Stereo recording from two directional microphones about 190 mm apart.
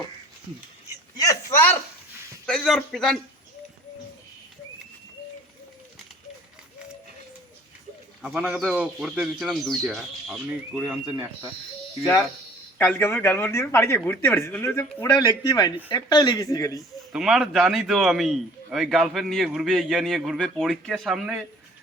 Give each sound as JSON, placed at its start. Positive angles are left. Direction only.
{"t": 1.1, "sound": "a man's voice", "side_deg": 20}
{"t": 2.5, "sound": "a man's voice", "side_deg": 0}
{"t": 8.2, "sound": "a man's voice", "side_deg": -5}
{"t": 12.8, "sound": "speech", "side_deg": 10}
{"t": 15.3, "sound": "speech", "side_deg": 20}
{"t": 17.1, "sound": "a man's voice", "side_deg": 0}